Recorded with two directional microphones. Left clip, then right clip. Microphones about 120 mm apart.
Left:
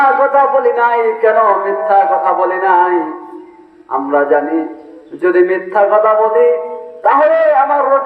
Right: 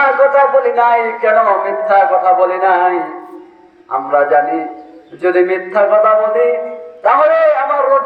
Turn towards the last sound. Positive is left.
turn(degrees=50)  # may be behind; listen again after turning